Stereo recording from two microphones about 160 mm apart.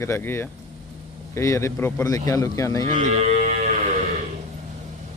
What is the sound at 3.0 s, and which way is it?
Music, 45° right (ahead or behind).